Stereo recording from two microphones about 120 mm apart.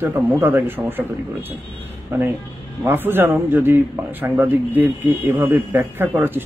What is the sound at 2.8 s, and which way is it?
A man's voice, 20° right (ahead or behind).